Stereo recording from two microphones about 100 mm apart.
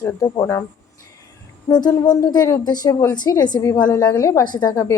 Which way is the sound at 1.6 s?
45° left (ahead or behind).